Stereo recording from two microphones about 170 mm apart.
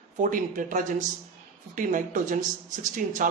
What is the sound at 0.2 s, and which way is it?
Speech, 50° right (ahead or behind).